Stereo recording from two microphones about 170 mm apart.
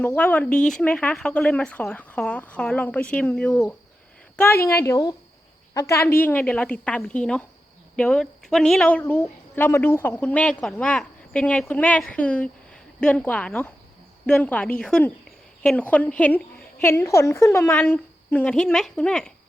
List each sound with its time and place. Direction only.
0.0 s a woman's voice: 10° left (ahead or behind)